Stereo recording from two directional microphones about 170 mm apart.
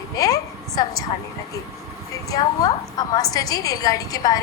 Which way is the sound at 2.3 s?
20° left (ahead or behind).